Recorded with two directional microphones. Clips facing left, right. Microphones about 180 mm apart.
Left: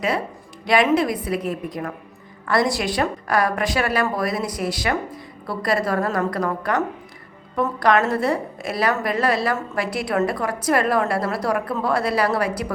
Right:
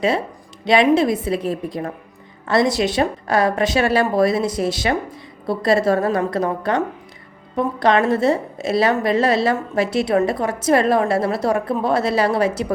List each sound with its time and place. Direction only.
0.6 s a woman's voice: 25° right (ahead or behind)